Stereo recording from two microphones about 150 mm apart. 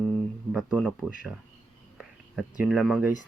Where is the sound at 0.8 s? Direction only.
5° left (ahead or behind).